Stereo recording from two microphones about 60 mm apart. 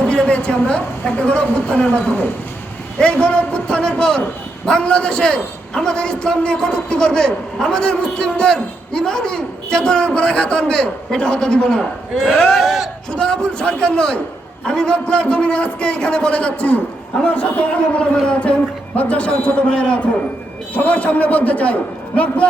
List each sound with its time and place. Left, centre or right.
0.0 s a sound: centre
1.2 s a man's voice: centre
11.8 s a man's voice: centre
13.1 s a man's voice: centre